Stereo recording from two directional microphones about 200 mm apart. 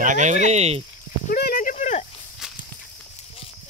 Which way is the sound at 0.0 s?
40° right (ahead or behind).